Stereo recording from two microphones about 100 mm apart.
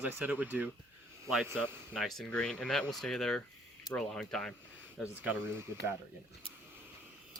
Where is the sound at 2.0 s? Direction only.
Centre (ahead or behind).